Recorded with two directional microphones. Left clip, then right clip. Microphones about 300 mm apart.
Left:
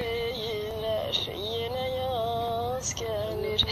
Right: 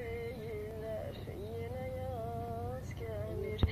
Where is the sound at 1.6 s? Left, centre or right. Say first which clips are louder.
Left 12 dB; centre.